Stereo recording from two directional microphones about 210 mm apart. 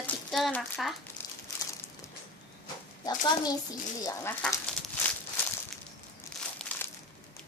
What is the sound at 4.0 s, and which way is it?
Speech, 10° left (ahead or behind).